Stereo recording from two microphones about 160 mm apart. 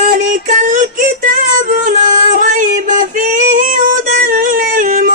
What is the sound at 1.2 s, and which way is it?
Music, 55° right (ahead or behind).